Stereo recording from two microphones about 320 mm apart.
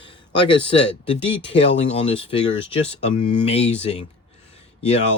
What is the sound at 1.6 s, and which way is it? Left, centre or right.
Speech, centre.